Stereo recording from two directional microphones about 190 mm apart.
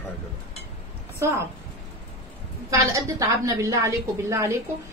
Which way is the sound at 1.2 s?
15° right (ahead or behind).